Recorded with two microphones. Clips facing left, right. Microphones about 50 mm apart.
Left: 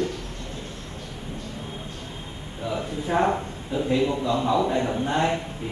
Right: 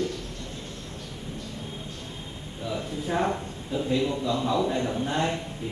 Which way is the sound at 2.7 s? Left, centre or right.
Left.